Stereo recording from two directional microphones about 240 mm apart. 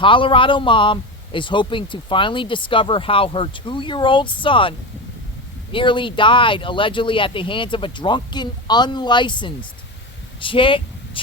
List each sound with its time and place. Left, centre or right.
0.0 s speech: left
5.7 s speech: centre